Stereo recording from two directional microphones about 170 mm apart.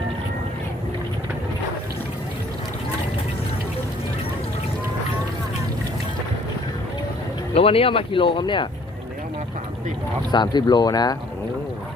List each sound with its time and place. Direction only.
7.5 s speech: 35° left (ahead or behind)
10.3 s speech: 25° left (ahead or behind)